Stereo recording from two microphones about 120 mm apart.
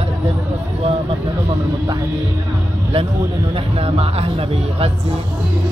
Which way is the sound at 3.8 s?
55° right (ahead or behind).